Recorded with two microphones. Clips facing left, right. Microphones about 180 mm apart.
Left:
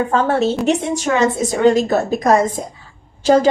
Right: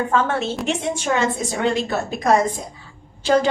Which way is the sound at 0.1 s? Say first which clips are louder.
Left 5 dB; 40° left (ahead or behind).